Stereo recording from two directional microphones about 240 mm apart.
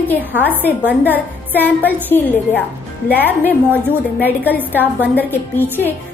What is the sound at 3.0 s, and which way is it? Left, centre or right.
A woman's voice, centre.